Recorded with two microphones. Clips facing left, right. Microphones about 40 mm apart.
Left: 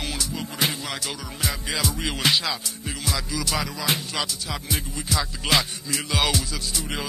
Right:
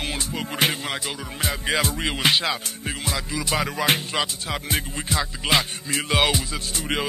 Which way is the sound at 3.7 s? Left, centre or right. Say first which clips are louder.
Right 4 dB; right.